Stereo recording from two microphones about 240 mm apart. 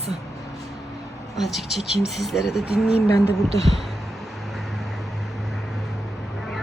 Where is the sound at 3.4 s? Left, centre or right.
Right.